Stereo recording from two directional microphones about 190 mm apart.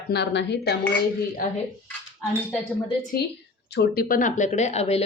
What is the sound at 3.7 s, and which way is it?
A woman's voice, 55° left (ahead or behind).